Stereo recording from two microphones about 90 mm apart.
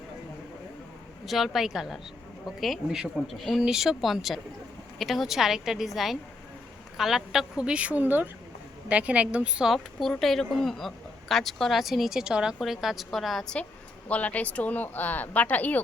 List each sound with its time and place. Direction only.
1.2 s a woman's voice: centre (ahead or behind)
9.7 s speech: 5° left (ahead or behind)
14.1 s speech: 15° left (ahead or behind)